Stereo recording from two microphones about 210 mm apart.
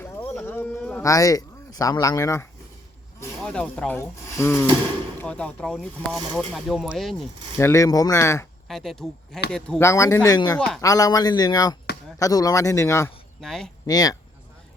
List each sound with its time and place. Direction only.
0.0 s a sound: 10° left (ahead or behind)
3.2 s speech: 5° left (ahead or behind)
7.6 s speech: 15° left (ahead or behind)
8.6 s speech: centre (ahead or behind)
13.4 s speech: centre (ahead or behind)
13.8 s speech: 15° left (ahead or behind)